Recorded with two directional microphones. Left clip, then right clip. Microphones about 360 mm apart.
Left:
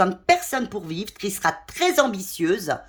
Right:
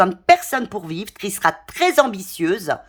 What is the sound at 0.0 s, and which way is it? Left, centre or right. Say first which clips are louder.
A woman's voice: right 5 dB; centre.